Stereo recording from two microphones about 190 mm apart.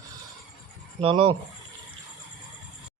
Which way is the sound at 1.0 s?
30° right (ahead or behind).